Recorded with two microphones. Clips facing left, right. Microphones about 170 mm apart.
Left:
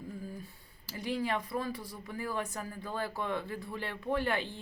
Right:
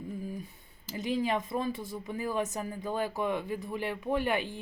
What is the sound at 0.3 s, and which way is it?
Speech, 20° right (ahead or behind).